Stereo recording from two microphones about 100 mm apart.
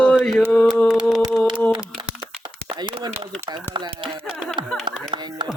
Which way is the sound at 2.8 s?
50° right (ahead or behind).